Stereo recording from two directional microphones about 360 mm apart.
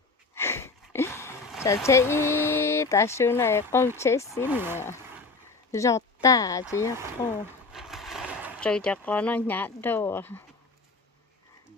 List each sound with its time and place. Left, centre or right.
0.3 s a sound: centre
4.4 s speech: centre
5.7 s speech: centre